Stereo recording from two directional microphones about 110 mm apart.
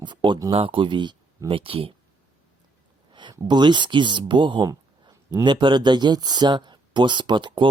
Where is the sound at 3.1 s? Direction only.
40° right (ahead or behind).